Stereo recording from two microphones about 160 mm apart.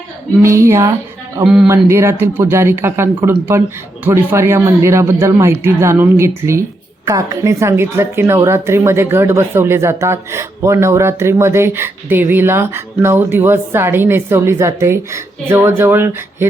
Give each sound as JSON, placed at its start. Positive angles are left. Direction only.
{"t": 0.3, "sound": "speech", "side_deg": -15}